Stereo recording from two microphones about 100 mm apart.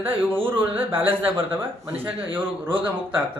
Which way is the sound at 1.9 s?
15° right (ahead or behind).